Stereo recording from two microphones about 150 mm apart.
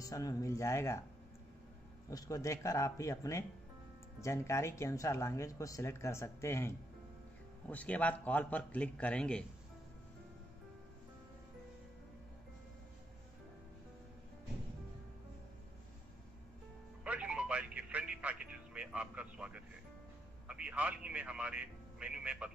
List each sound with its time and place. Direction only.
0.0 s speech: 20° left (ahead or behind)
2.0 s a man's voice: 20° left (ahead or behind)
17.0 s music: 10° right (ahead or behind)
20.4 s speech: 10° right (ahead or behind)